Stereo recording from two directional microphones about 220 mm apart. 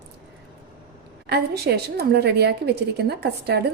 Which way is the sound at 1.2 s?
45° right (ahead or behind).